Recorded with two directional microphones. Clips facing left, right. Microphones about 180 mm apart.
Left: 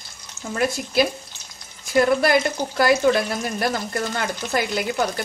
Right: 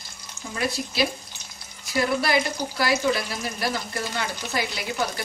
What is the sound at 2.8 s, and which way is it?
A woman's voice, 55° left (ahead or behind).